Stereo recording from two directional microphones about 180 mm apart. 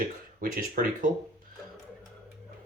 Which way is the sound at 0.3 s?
50° right (ahead or behind).